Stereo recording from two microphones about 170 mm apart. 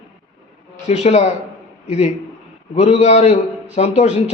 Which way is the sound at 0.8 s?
40° left (ahead or behind).